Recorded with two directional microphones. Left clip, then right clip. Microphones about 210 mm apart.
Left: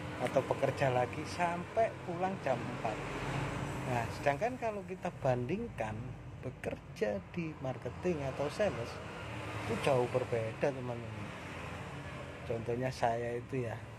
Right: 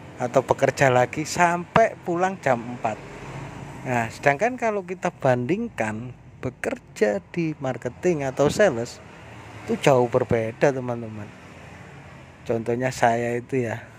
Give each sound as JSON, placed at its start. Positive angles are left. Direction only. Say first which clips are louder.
{"t": 0.3, "sound": "speech", "louder": "right 13 dB", "side_deg": -50}
{"t": 3.9, "sound": "speech", "louder": "right 13 dB", "side_deg": -45}
{"t": 12.4, "sound": "speech", "louder": "right 12 dB", "side_deg": -45}